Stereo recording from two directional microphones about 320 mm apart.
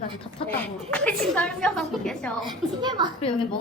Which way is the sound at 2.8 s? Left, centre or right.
Centre.